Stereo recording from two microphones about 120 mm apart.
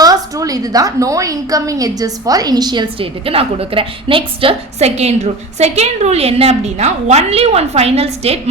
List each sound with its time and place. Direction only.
0.0 s a woman's voice: 30° right (ahead or behind); by 8.4 s 55° right (ahead or behind)